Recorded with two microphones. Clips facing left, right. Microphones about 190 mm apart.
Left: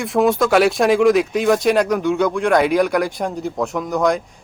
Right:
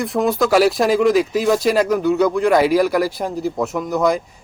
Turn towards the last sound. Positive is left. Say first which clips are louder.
# even
turn(degrees=0)  # may be behind; listen again after turning